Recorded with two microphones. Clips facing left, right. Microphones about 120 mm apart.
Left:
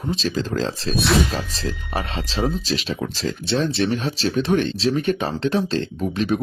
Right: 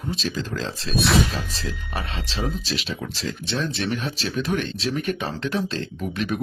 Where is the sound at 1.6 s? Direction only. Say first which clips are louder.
Left 4 dB; 35° left (ahead or behind).